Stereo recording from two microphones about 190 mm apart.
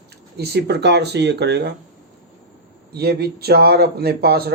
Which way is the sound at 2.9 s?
55° right (ahead or behind).